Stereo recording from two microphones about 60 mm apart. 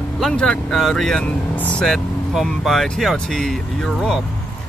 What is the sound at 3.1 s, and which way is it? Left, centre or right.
Speech, centre.